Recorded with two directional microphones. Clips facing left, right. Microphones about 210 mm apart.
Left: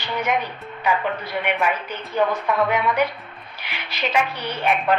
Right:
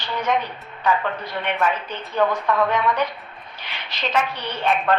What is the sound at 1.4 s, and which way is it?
A woman's voice, 10° left (ahead or behind).